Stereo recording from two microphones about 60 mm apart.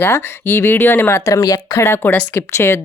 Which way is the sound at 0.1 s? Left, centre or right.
Left.